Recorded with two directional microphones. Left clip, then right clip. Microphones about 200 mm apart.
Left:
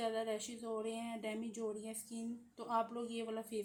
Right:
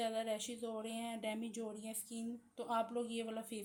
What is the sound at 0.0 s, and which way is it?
A woman's voice, 40° right (ahead or behind).